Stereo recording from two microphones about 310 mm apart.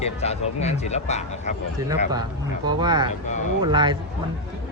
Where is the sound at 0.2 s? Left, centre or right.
Left.